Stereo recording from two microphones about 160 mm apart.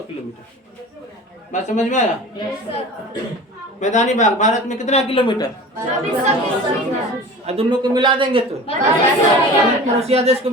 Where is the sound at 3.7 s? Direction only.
45° left (ahead or behind); by 5.4 s 30° left (ahead or behind).